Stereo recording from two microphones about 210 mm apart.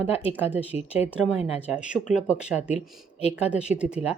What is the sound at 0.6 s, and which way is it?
Speech, 30° left (ahead or behind).